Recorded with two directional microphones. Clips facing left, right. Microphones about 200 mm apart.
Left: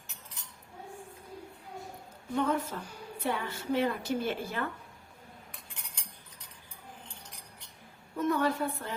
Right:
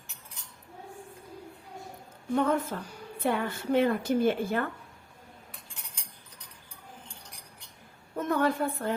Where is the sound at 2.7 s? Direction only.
55° right (ahead or behind).